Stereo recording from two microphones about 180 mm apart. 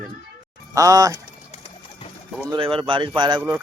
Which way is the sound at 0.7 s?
20° right (ahead or behind).